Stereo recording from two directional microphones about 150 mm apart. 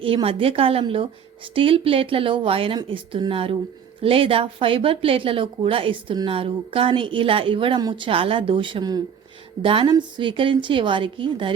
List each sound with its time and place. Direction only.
0.0 s speech: 35° right (ahead or behind)